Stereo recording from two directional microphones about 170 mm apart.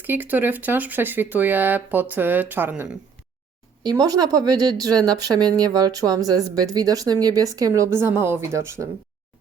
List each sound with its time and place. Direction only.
0.0 s speech: 10° right (ahead or behind)
3.8 s speech: 20° right (ahead or behind)